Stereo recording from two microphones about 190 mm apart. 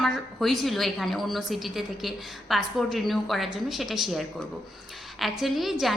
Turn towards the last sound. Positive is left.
turn(degrees=0)  # may be behind; listen again after turning